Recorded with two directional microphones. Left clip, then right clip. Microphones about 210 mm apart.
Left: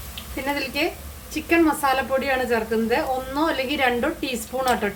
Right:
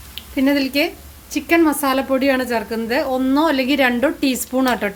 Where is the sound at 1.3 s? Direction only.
50° right (ahead or behind).